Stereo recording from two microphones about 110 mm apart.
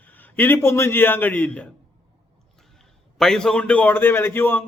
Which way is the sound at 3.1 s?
5° left (ahead or behind).